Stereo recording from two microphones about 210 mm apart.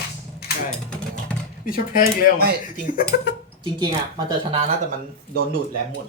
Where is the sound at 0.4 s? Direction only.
50° left (ahead or behind).